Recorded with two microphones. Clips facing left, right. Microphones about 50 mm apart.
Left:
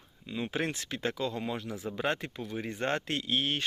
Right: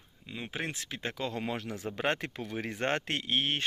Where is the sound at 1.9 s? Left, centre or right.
Right.